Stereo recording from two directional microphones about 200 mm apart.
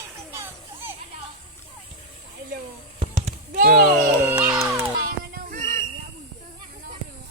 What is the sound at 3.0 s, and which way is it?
Basketball bounce, 30° right (ahead or behind).